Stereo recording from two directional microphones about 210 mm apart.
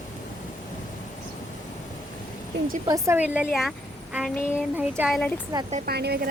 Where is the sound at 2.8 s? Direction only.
15° right (ahead or behind).